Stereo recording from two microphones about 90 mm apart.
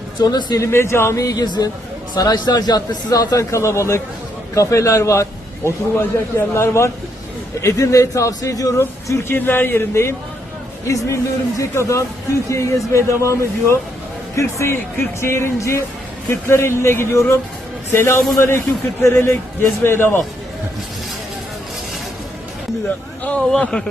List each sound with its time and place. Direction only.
0.2 s speech: 50° left (ahead or behind)
0.6 s a man's voice: 30° left (ahead or behind)
8.8 s a man's voice: 30° left (ahead or behind)
23.5 s a man's voice: 5° left (ahead or behind)